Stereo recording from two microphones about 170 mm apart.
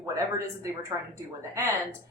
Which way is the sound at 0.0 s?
20° right (ahead or behind).